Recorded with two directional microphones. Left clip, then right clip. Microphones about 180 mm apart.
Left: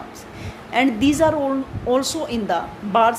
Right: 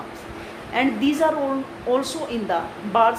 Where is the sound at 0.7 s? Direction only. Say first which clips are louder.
Left 3 dB; 50° left (ahead or behind).